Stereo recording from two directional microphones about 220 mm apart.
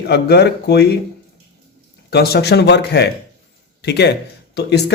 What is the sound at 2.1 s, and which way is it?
Speech, 45° left (ahead or behind).